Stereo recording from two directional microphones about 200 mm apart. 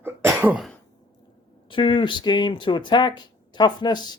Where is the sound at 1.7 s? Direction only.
25° left (ahead or behind).